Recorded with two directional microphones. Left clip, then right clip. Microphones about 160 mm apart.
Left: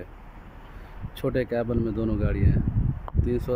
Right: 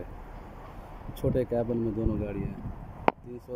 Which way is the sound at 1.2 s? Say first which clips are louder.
Left 2 dB; 10° right (ahead or behind).